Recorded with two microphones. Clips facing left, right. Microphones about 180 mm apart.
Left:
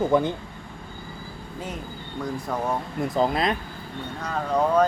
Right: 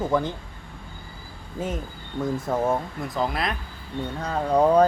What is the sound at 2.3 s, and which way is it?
Speech, 25° right (ahead or behind).